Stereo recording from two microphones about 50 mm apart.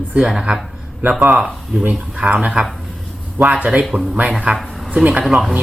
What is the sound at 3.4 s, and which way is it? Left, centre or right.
Speech, right.